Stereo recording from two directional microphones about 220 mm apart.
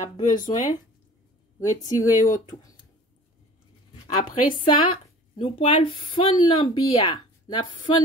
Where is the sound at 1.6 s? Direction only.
15° left (ahead or behind).